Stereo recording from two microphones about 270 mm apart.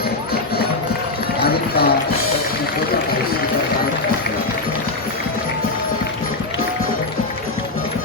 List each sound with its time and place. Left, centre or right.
1.5 s run: left